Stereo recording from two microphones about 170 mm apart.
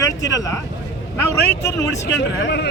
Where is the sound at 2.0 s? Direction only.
90° left.